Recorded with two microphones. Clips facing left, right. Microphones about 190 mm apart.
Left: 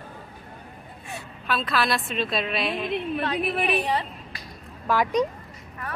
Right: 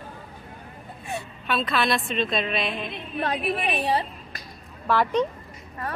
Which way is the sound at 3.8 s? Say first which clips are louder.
Right 2 dB; 30° right (ahead or behind).